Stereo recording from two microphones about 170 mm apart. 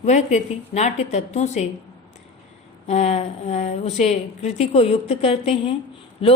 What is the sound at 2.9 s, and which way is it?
Speech, 40° left (ahead or behind).